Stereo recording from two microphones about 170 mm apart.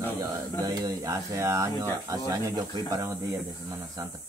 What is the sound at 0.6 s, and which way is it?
Speech, 20° right (ahead or behind).